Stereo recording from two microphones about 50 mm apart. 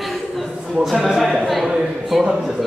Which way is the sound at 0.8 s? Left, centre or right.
Centre.